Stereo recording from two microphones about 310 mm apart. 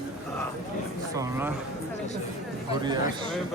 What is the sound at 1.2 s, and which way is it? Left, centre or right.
Speech, centre.